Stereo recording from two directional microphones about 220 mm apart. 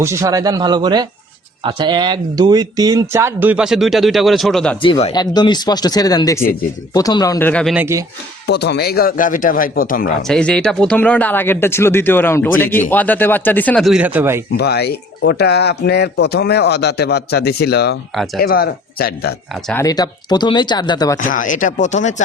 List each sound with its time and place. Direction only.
0.0 s speech: 15° right (ahead or behind); by 4.8 s 5° left (ahead or behind)
4.8 s speech: 25° left (ahead or behind); by 8.0 s 10° right (ahead or behind)
8.4 s a man's voice: 50° left (ahead or behind)
10.2 s speech: 5° left (ahead or behind)
14.5 s speech: 45° left (ahead or behind)
19.6 s speech: 10° left (ahead or behind)
21.2 s a man's voice: 35° left (ahead or behind)